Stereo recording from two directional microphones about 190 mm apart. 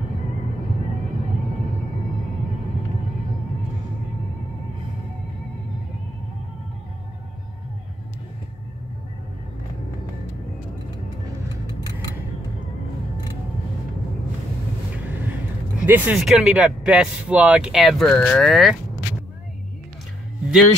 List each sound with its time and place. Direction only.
15.8 s speech: 10° right (ahead or behind)